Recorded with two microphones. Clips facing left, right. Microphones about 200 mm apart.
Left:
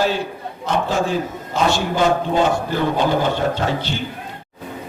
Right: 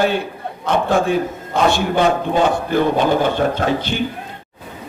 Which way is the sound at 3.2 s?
55° right (ahead or behind).